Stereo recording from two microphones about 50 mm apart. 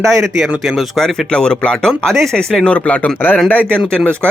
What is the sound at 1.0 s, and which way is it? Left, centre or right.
Speech, centre.